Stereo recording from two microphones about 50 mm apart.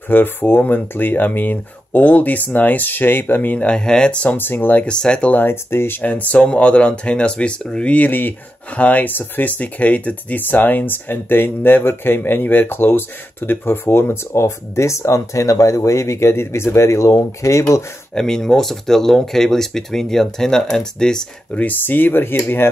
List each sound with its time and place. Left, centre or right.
0.1 s speech: left
3.5 s speech: left
4.4 s speech: left
4.8 s speech: left
5.3 s speech: left
5.9 s speech: left
14.3 s speech: left
18.1 s speech: centre
21.5 s speech: left